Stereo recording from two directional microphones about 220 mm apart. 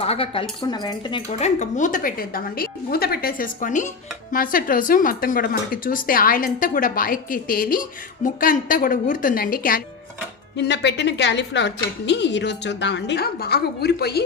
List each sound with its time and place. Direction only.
0.0 s a woman's voice: 25° left (ahead or behind); by 14.3 s 45° left (ahead or behind)